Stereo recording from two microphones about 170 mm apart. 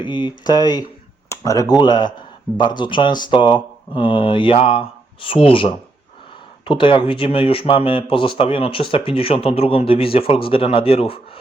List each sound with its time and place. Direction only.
0.0 s speech: 25° left (ahead or behind)